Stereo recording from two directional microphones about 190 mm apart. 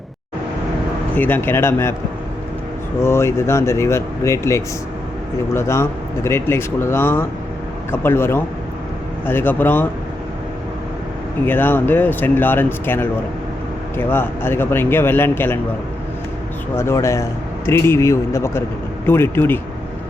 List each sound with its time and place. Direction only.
1.1 s speech: 10° left (ahead or behind)
3.0 s speech: 15° left (ahead or behind)
11.4 s speech: 10° left (ahead or behind)
16.7 s speech: 15° left (ahead or behind)